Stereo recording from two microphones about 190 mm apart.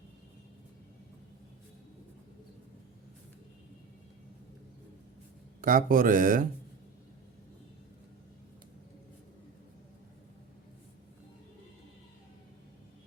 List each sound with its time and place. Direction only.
5.6 s speech: 50° right (ahead or behind)